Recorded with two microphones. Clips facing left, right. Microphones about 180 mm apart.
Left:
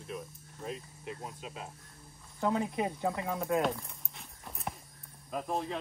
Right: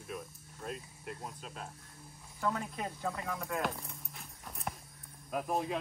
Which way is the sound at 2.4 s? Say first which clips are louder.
Left 5 dB; 20° left (ahead or behind).